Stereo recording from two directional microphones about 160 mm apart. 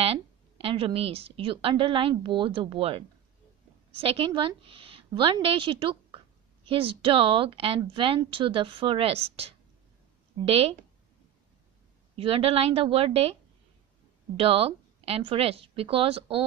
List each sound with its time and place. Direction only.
0.0 s a woman's voice: 35° right (ahead or behind)
12.2 s a woman's voice: 35° right (ahead or behind)